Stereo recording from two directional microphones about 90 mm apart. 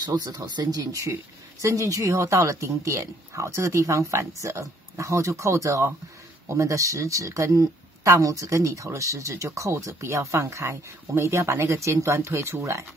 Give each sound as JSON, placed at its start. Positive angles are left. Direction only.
{"t": 0.0, "sound": "speech", "side_deg": -45}